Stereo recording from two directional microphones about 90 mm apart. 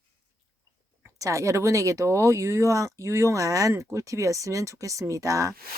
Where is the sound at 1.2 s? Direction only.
35° right (ahead or behind).